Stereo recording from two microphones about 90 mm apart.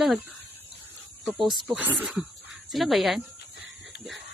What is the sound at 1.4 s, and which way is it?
Speech, centre (ahead or behind).